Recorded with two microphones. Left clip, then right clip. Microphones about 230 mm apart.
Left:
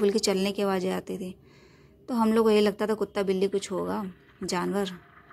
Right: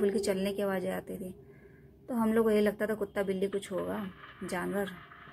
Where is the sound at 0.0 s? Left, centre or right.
Left.